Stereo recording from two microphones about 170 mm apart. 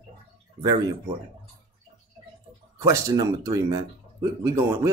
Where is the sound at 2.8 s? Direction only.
20° right (ahead or behind).